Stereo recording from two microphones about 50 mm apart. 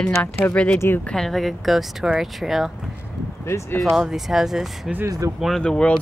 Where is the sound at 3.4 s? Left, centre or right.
Left.